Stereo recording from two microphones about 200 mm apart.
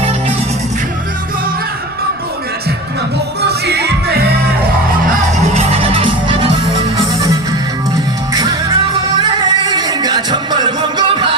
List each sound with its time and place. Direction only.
3.4 s music: 55° right (ahead or behind)
5.0 s music: 35° right (ahead or behind)
8.3 s music: 20° right (ahead or behind)